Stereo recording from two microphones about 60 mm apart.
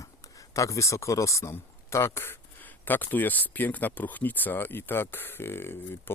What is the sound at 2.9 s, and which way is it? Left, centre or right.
Speech, left.